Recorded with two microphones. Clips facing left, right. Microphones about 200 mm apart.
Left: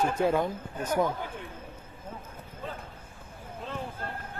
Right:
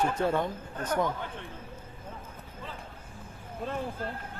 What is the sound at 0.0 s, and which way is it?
Speech, 10° left (ahead or behind).